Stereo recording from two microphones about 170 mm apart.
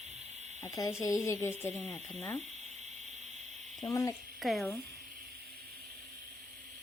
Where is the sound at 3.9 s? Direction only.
15° left (ahead or behind).